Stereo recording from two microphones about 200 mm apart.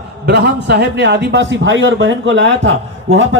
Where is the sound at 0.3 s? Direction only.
55° right (ahead or behind).